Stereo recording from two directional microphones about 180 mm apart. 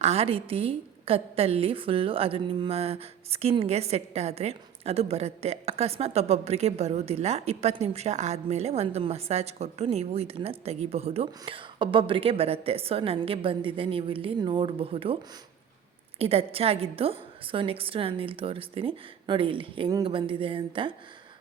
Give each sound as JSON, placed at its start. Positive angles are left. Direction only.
{"t": 0.0, "sound": "a woman's voice", "side_deg": -35}